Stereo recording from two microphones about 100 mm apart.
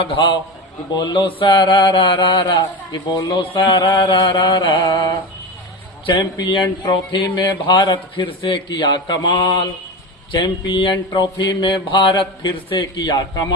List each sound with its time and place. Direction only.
0.0 s a man's voice: 55° left (ahead or behind); by 5.1 s 40° left (ahead or behind)
6.1 s speech: 40° left (ahead or behind)
12.8 s speech: 40° left (ahead or behind)